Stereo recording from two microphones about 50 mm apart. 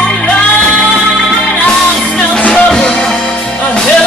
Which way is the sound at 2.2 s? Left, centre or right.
Left.